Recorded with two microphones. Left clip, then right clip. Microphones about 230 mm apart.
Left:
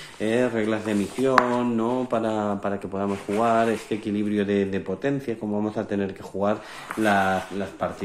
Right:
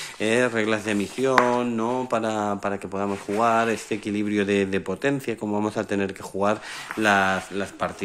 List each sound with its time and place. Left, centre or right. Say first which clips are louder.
0.2 s speech: right 1 dB; right
1.6 s mantra: even; right
3.3 s speech: even; right